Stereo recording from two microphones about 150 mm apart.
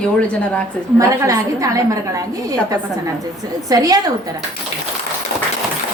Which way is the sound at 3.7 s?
25° right (ahead or behind).